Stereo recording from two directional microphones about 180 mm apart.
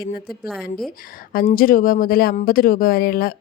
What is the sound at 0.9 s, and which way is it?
A woman's voice, 55° left (ahead or behind).